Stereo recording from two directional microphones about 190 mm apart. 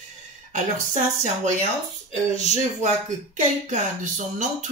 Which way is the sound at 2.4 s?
40° right (ahead or behind).